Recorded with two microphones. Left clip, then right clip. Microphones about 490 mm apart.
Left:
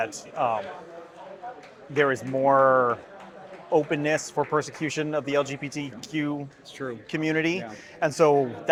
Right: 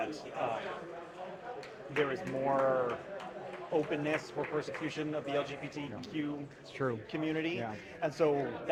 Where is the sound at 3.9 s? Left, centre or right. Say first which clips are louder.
Left 9 dB; left.